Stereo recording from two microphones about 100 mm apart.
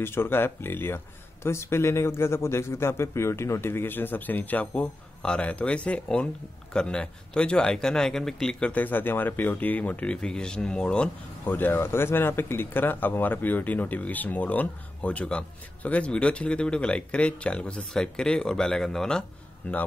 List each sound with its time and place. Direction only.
0.0 s speech: 25° left (ahead or behind)
11.4 s speech: 20° left (ahead or behind)